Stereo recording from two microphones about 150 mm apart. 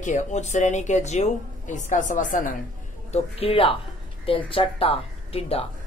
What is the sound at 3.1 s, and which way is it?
A woman's voice, 40° left (ahead or behind).